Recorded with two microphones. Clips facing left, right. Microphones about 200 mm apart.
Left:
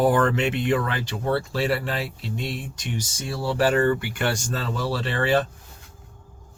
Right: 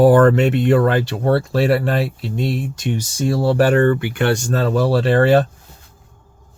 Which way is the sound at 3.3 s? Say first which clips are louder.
Right 7 dB; 50° right (ahead or behind).